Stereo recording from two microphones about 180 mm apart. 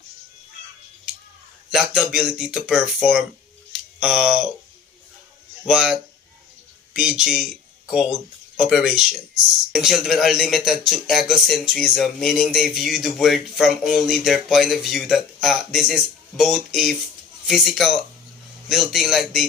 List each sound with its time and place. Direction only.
1.7 s speech: centre (ahead or behind)
3.7 s a sound: 5° right (ahead or behind)
5.6 s speech: 5° right (ahead or behind)
8.5 s speech: 5° right (ahead or behind)